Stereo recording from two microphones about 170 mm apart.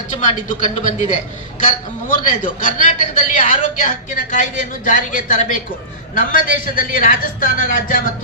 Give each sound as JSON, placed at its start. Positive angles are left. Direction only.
{"t": 0.2, "sound": "a man's voice", "side_deg": 45}